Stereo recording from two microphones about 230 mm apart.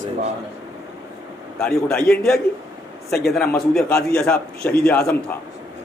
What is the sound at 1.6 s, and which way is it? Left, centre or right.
A man's voice, centre.